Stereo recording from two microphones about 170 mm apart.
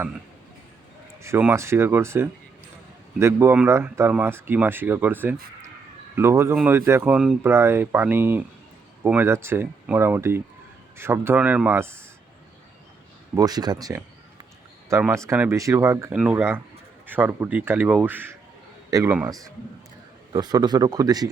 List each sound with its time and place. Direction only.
1.2 s speech: 15° right (ahead or behind)
13.3 s speech: 20° right (ahead or behind)
15.1 s a man's voice: 15° right (ahead or behind)
20.3 s speech: 25° right (ahead or behind)